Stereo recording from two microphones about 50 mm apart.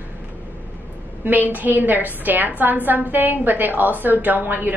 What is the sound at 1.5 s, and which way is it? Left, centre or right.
A woman's voice, right.